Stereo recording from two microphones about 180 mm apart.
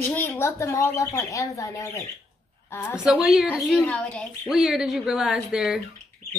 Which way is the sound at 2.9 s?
5° right (ahead or behind).